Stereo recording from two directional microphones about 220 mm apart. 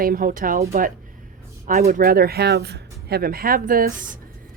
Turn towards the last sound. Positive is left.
turn(degrees=-40)  # may be behind; listen again after turning